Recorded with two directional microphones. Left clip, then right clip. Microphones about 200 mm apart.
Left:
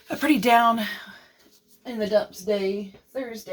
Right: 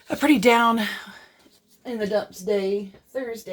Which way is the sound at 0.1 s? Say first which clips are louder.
Right 1 dB; 40° right (ahead or behind).